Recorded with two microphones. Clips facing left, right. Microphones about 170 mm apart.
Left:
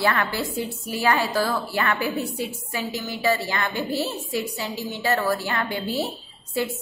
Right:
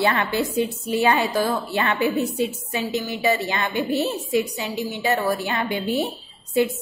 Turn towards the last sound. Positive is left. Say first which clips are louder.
# right 6 dB
turn(degrees=-20)  # may be behind; listen again after turning